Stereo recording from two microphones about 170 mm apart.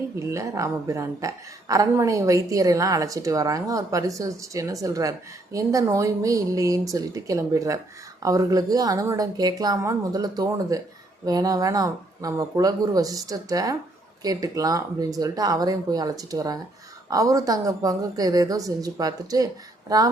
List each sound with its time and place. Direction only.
0.3 s a woman's voice: 20° right (ahead or behind)